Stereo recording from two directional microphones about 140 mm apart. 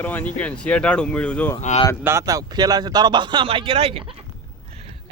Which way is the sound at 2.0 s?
20° right (ahead or behind).